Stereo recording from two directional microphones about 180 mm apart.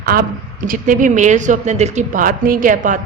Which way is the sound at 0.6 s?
50° right (ahead or behind).